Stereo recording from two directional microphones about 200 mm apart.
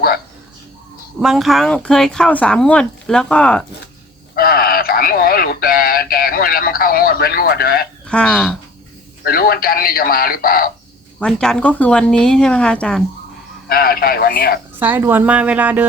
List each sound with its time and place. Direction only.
1.2 s speech: centre (ahead or behind)
4.4 s speech: 50° left (ahead or behind)
8.0 s speech: 5° left (ahead or behind)
9.2 s speech: 50° left (ahead or behind)
11.2 s speech: 5° left (ahead or behind)
13.7 s speech: 50° left (ahead or behind)
14.8 s speech: 10° right (ahead or behind)